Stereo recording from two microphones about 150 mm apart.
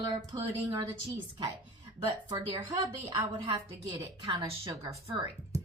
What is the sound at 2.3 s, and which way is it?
A woman's voice, 25° right (ahead or behind).